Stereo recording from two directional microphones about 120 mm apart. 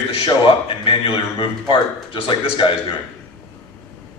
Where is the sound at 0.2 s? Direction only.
50° left (ahead or behind).